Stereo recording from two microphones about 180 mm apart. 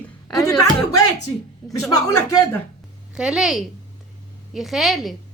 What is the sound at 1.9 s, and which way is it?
Speech, 20° left (ahead or behind).